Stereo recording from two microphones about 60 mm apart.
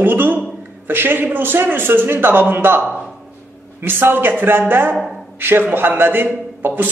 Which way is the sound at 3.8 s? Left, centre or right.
Right.